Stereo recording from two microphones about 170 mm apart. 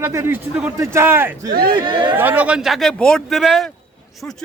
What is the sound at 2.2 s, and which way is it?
Speech, 10° right (ahead or behind).